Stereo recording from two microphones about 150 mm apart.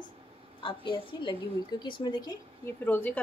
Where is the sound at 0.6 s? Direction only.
35° left (ahead or behind).